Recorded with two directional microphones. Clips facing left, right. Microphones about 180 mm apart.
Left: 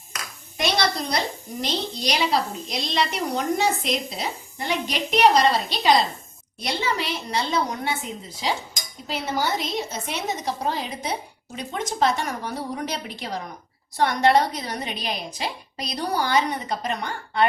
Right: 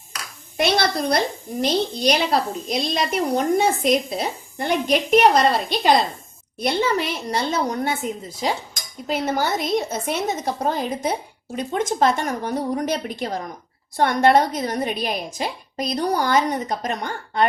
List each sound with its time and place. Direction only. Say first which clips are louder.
1.6 s a woman's voice: right 7 dB; 55° right (ahead or behind)